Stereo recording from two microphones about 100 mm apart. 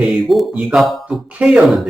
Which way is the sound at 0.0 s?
Centre (ahead or behind).